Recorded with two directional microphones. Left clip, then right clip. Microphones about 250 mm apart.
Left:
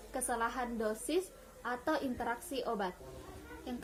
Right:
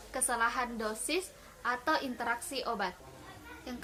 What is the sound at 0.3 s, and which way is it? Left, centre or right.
Speech, centre.